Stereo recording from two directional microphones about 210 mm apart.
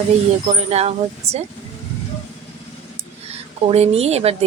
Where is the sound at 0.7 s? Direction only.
30° right (ahead or behind).